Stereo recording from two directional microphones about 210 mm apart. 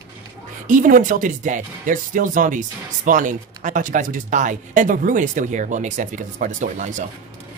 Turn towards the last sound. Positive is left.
turn(degrees=-35)  # may be behind; listen again after turning